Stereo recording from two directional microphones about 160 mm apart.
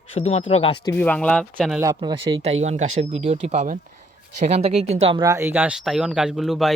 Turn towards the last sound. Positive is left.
turn(degrees=0)  # may be behind; listen again after turning